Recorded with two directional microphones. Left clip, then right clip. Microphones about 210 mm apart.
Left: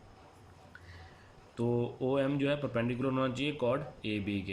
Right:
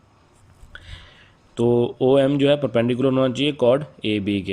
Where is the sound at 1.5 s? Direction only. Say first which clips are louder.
Right 14 dB; 35° right (ahead or behind).